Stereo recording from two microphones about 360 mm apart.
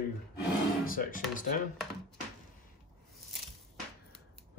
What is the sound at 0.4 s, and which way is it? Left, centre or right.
Drawer open or close, left.